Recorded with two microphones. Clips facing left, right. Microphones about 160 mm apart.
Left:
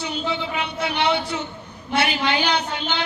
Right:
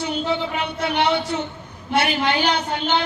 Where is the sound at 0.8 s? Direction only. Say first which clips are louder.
Right 2 dB; 50° right (ahead or behind).